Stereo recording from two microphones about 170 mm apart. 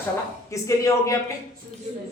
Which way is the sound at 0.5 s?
20° left (ahead or behind).